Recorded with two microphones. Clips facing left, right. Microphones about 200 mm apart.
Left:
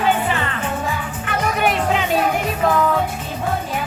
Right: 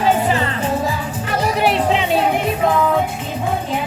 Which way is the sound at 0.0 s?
35° right (ahead or behind).